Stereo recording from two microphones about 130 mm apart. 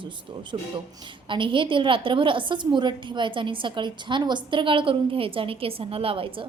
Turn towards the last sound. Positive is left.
turn(degrees=-45)  # may be behind; listen again after turning